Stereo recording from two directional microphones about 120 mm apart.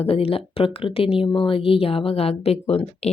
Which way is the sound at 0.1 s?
55° left (ahead or behind).